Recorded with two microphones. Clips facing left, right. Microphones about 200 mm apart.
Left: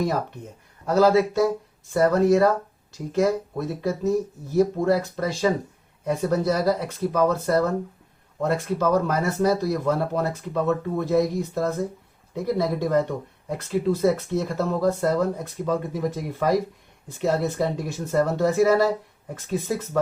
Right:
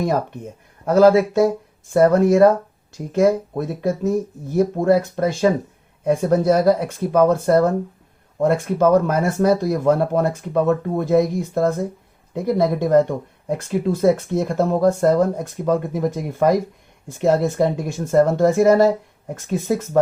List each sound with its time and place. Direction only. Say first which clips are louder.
0.9 s speech: right 5 dB; 50° right (ahead or behind)